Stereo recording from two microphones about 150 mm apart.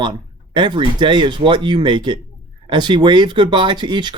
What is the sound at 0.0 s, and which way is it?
Speech, 30° right (ahead or behind).